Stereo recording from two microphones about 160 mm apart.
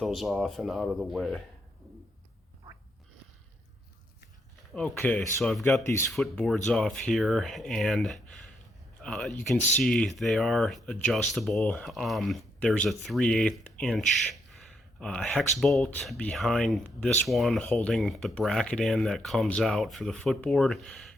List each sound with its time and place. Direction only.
0.0 s speech: centre (ahead or behind)
4.7 s speech: 10° left (ahead or behind)
5.8 s speech: 15° left (ahead or behind)
6.1 s speech: centre (ahead or behind)